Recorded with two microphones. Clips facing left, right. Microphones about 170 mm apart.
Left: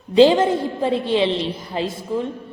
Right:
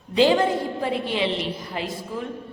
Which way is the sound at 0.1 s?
25° left (ahead or behind).